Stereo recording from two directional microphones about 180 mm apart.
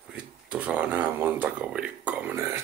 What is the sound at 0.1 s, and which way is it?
Speech, 5° right (ahead or behind).